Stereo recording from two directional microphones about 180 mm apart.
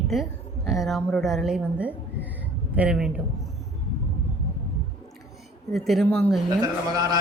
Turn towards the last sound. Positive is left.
turn(degrees=-20)  # may be behind; listen again after turning